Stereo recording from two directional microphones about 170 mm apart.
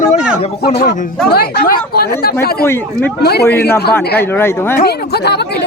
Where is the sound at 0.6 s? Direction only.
70° left (ahead or behind).